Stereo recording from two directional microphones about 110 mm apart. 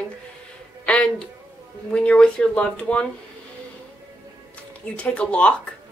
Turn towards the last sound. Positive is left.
turn(degrees=10)  # may be behind; listen again after turning